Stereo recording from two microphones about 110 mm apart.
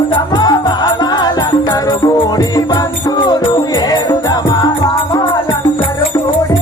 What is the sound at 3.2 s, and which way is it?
Music, 35° left (ahead or behind).